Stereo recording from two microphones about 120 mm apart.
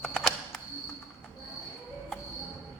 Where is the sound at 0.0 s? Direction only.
5° left (ahead or behind).